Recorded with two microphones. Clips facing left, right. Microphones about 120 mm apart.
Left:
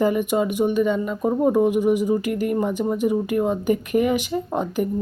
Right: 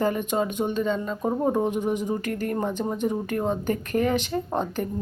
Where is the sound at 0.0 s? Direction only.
10° left (ahead or behind).